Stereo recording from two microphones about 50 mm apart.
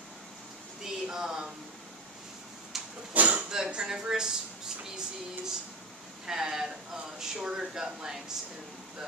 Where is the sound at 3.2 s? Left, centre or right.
Right.